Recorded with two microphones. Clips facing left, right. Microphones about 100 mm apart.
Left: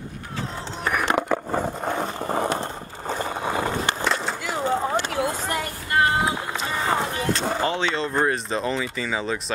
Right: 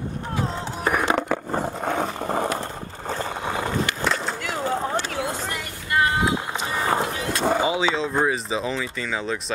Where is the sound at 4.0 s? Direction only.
Centre (ahead or behind).